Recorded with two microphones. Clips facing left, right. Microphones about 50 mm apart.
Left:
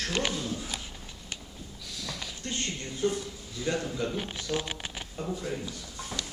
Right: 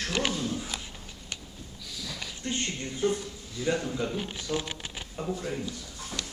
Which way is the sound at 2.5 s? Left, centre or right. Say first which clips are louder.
Right 3 dB; centre.